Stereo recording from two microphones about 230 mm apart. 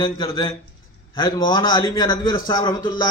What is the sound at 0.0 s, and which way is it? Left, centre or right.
A man's voice, centre.